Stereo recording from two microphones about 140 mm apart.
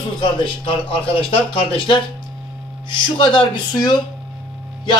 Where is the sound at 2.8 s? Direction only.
35° left (ahead or behind).